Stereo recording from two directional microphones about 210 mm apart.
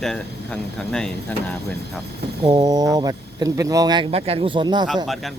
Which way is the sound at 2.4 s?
20° right (ahead or behind).